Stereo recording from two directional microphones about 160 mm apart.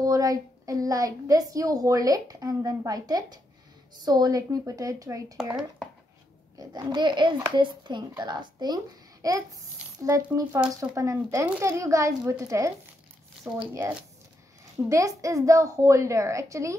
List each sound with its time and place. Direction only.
0.0 s a woman's voice: 20° right (ahead or behind)
6.6 s a woman's voice: 25° right (ahead or behind)
14.9 s a woman's voice: 20° right (ahead or behind)